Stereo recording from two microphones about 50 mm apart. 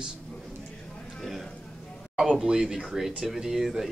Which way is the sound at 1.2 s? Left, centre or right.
Centre.